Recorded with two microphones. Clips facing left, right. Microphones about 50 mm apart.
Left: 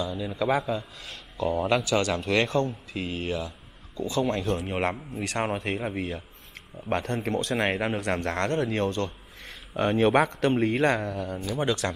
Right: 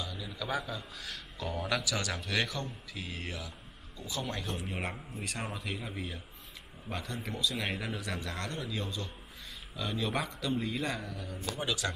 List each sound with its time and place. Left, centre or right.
0.1 s speech: left